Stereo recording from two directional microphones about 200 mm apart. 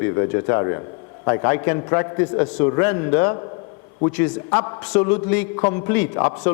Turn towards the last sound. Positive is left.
turn(degrees=10)  # may be behind; listen again after turning